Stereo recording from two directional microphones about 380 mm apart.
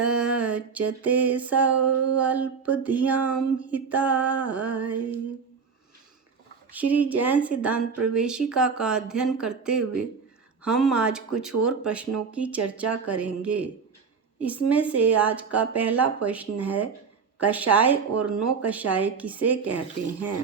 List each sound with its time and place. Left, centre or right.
0.0 s a sound: centre
1.0 s speech: centre
6.7 s speech: centre